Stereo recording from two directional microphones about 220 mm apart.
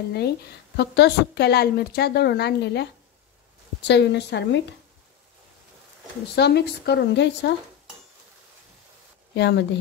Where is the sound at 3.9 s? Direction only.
50° left (ahead or behind).